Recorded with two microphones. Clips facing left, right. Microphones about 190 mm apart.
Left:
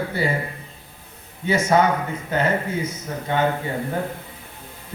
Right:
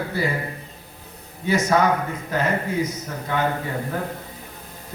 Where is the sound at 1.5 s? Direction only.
25° left (ahead or behind).